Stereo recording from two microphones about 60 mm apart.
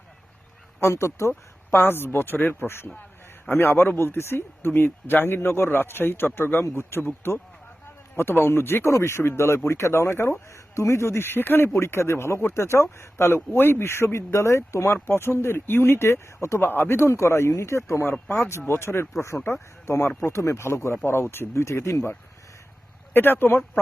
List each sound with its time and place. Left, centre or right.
0.8 s speech: left
1.3 s a woman's voice: left
8.1 s a man's voice: left
8.9 s speech: left
10.5 s speech: left
11.7 s speech: left
18.1 s a man's voice: left
18.7 s speech: left
19.3 s speech: centre
20.1 s speech: left
23.1 s a man's voice: left